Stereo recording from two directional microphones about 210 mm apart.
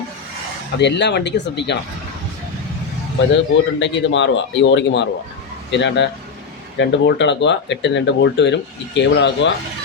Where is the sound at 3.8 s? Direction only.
60° left (ahead or behind).